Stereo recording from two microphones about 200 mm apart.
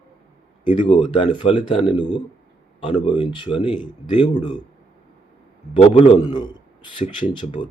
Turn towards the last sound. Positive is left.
turn(degrees=25)  # may be behind; listen again after turning